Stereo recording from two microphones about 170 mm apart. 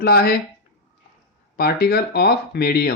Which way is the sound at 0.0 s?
65° left (ahead or behind).